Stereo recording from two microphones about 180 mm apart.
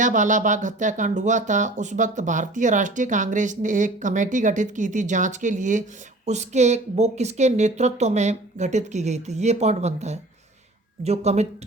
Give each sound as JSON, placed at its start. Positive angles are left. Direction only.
{"t": 0.0, "sound": "speech", "side_deg": -45}